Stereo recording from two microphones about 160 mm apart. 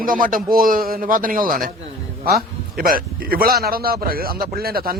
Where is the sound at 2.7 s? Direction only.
65° right (ahead or behind).